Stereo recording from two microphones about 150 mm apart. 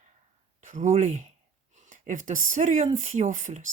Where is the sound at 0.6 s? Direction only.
55° right (ahead or behind).